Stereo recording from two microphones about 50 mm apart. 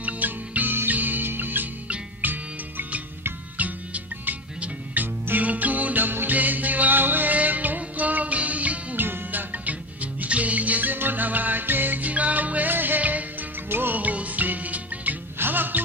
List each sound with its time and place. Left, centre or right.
0.0 s music: right
3.5 s music: right
9.0 s music: right
15.3 s music: right